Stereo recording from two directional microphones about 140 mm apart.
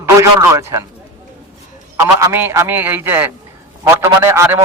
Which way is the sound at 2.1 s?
15° right (ahead or behind).